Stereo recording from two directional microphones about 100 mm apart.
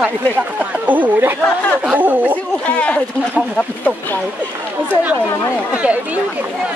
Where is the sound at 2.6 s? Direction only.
15° left (ahead or behind).